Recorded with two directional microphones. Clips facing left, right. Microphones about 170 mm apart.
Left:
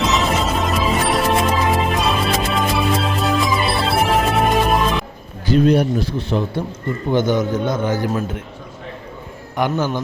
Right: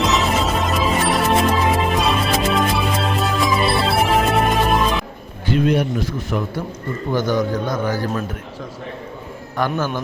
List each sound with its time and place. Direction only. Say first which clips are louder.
0.0 s music: even; centre (ahead or behind)
5.5 s a man's voice: left 3 dB; 35° left (ahead or behind)
9.6 s a man's voice: left 2 dB; 20° left (ahead or behind)